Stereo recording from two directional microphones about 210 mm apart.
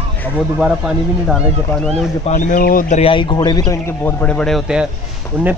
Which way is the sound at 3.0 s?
25° left (ahead or behind).